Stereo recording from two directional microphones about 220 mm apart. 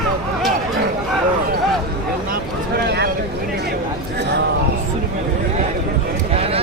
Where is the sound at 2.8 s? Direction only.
50° right (ahead or behind).